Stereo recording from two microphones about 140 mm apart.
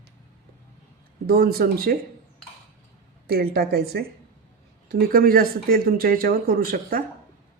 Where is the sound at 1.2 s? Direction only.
90° right.